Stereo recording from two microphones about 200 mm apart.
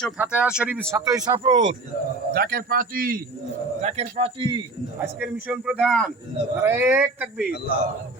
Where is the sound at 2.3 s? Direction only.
50° right (ahead or behind).